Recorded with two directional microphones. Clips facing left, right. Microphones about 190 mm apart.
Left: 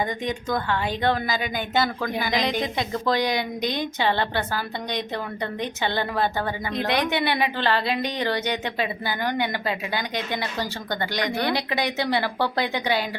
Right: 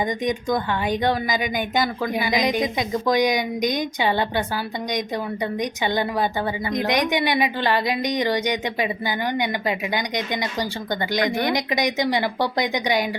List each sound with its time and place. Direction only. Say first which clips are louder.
0.0 s a woman's voice: right 4 dB; 15° right (ahead or behind)